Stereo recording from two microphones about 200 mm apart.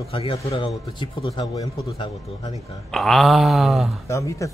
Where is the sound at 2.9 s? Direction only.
Centre (ahead or behind).